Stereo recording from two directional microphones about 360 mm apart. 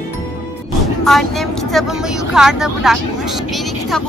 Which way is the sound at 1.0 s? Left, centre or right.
Centre.